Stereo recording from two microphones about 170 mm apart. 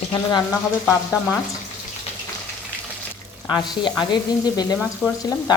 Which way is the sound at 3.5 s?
25° left (ahead or behind).